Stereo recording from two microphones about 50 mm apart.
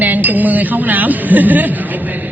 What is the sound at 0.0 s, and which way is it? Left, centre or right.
Speech, right.